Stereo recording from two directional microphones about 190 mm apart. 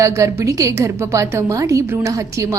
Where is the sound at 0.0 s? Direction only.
15° right (ahead or behind).